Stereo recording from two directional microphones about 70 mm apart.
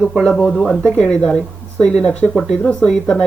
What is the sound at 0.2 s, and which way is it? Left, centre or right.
Speech, centre.